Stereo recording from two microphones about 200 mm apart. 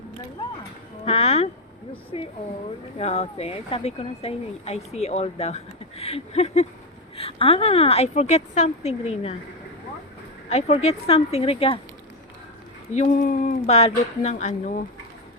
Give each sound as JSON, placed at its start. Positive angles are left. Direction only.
{"t": 1.0, "sound": "speech", "side_deg": 30}
{"t": 10.5, "sound": "speech", "side_deg": 30}
{"t": 13.0, "sound": "speech", "side_deg": 40}